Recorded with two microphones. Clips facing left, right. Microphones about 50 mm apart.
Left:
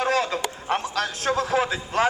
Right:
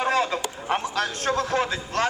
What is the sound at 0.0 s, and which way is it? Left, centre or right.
A man's voice, centre.